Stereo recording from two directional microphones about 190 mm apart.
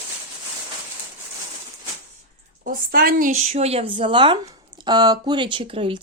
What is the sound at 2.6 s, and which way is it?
Speech, 50° right (ahead or behind).